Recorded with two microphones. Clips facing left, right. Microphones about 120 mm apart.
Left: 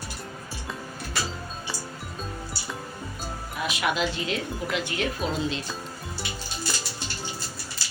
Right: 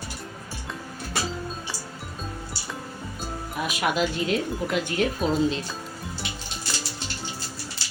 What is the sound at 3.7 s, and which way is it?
Speech, 45° right (ahead or behind).